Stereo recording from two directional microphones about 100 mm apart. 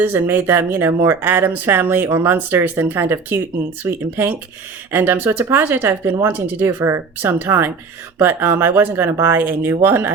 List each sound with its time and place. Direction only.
0.0 s speech: 20° right (ahead or behind)